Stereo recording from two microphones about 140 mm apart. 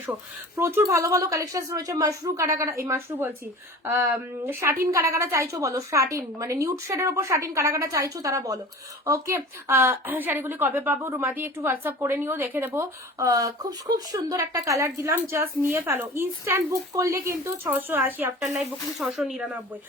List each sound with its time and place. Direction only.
0.0 s a woman's voice: 15° right (ahead or behind)
18.4 s speech: centre (ahead or behind)